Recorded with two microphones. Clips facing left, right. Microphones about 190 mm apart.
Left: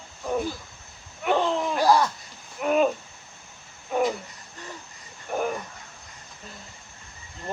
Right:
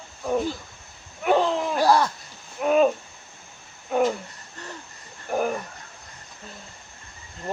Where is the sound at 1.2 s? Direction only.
5° right (ahead or behind).